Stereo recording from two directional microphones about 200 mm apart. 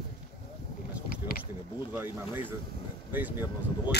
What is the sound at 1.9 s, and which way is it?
Speech, 10° right (ahead or behind).